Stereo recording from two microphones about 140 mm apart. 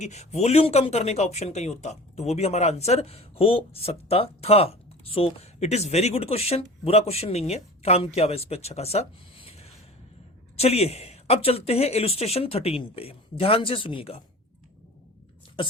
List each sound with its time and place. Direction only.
0.0 s speech: 55° left (ahead or behind)